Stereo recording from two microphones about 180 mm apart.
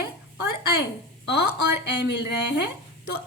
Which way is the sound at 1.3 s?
65° left (ahead or behind).